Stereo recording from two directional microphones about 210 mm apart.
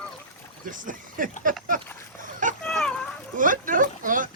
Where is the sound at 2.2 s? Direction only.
40° right (ahead or behind).